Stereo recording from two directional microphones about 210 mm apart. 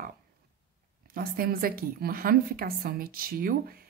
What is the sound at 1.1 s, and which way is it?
A woman's voice, 45° right (ahead or behind).